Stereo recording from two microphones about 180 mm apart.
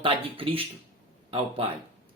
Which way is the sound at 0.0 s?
30° right (ahead or behind).